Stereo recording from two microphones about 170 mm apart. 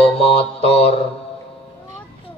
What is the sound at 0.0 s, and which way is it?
Mantra, 35° left (ahead or behind).